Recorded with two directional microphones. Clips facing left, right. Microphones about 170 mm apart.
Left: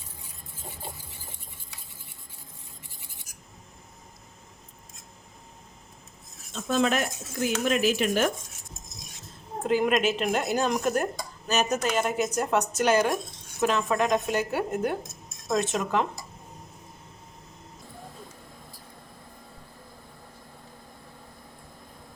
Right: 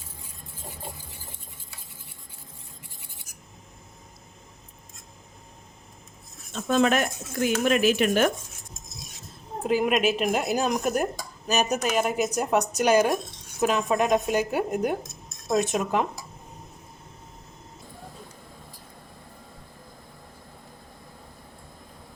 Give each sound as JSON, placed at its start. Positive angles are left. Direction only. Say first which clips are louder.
{"t": 6.5, "sound": "speech", "louder": "right 3 dB", "side_deg": -55}
{"t": 9.6, "sound": "speech", "louder": "right 1 dB", "side_deg": -5}